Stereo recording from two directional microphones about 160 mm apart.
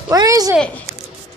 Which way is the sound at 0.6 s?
10° left (ahead or behind).